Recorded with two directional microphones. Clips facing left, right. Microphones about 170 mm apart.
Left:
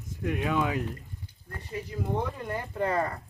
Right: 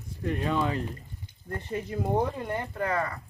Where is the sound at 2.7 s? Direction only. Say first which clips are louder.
Left 3 dB; 30° left (ahead or behind).